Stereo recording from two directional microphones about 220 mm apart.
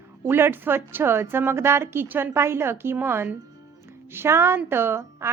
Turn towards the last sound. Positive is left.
turn(degrees=-10)  # may be behind; listen again after turning